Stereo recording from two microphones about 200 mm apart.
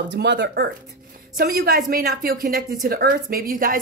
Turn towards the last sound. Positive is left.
turn(degrees=-45)  # may be behind; listen again after turning